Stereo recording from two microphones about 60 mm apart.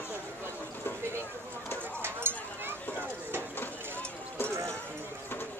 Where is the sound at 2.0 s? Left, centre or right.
Right.